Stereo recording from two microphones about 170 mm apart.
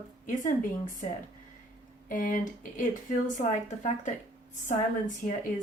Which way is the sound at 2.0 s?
50° left (ahead or behind).